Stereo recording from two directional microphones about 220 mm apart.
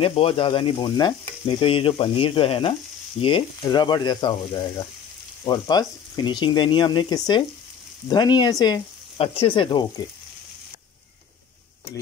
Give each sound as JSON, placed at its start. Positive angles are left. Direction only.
{"t": 0.0, "sound": "frying", "side_deg": 25}